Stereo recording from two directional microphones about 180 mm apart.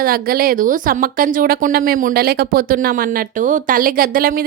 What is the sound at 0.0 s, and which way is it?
A woman's voice, 55° right (ahead or behind).